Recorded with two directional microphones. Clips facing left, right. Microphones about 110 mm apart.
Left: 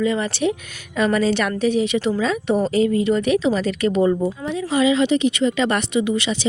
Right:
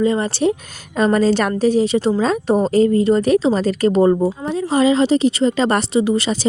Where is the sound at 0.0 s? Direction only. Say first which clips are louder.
Right 3 dB; 35° right (ahead or behind).